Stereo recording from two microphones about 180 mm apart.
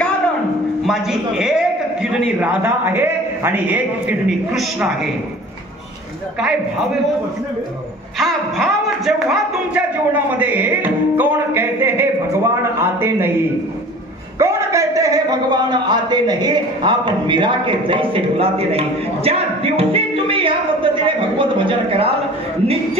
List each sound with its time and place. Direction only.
0.8 s a man's voice: centre (ahead or behind)
8.2 s a man's voice: centre (ahead or behind)
14.4 s a man's voice: 15° right (ahead or behind)